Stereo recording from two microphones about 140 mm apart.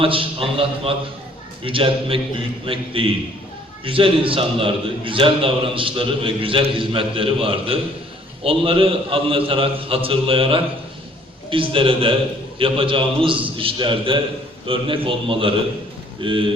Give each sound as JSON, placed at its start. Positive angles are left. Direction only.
{"t": 0.0, "sound": "a man's voice", "side_deg": -40}